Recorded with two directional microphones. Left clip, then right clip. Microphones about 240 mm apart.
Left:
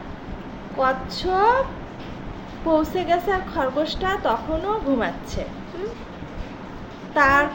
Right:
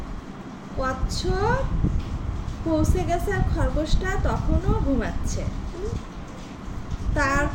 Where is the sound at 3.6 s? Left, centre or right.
Centre.